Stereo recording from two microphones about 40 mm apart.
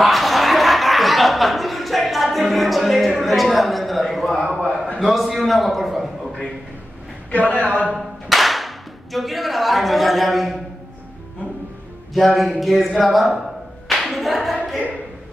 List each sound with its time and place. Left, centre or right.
0.0 s a man's voice: centre
4.5 s a sound: centre
5.0 s a man's voice: centre
7.2 s a man's voice: left
8.3 s speech: centre
12.1 s speech: centre
13.8 s clapping: centre